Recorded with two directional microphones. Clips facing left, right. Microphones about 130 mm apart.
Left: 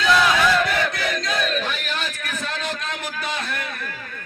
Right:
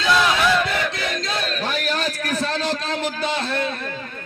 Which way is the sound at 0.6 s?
25° right (ahead or behind).